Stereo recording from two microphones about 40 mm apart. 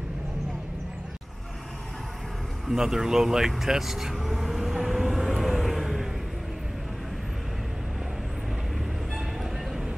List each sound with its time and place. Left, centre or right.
2.7 s vehicle: centre
9.1 s music: centre